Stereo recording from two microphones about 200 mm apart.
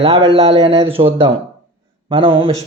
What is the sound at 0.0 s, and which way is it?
A man's voice, 30° right (ahead or behind).